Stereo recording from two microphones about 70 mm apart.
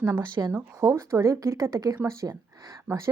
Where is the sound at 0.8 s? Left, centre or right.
Right.